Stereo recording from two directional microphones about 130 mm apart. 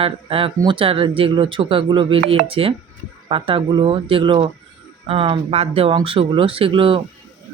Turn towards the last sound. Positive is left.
turn(degrees=-45)  # may be behind; listen again after turning